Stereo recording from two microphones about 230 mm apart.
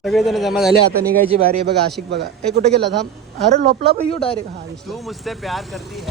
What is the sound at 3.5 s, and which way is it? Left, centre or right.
Speech, right.